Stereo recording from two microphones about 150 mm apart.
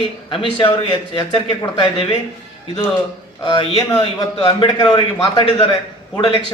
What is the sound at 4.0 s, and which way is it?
A man's voice, 35° left (ahead or behind).